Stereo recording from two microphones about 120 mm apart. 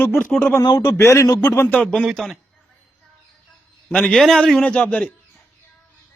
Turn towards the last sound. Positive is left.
turn(degrees=10)  # may be behind; listen again after turning